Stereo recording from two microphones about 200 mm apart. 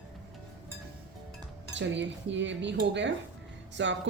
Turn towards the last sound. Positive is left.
turn(degrees=-65)  # may be behind; listen again after turning